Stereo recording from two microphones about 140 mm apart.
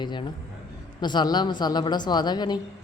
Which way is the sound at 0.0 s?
35° left (ahead or behind).